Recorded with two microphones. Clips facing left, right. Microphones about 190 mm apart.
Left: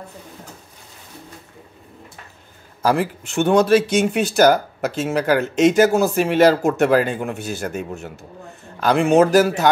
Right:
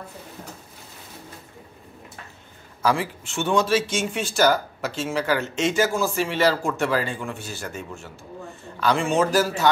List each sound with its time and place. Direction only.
2.8 s a man's voice: 45° left (ahead or behind)
3.9 s speech: 60° left (ahead or behind)